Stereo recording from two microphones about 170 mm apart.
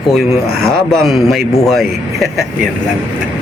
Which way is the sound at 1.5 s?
20° left (ahead or behind).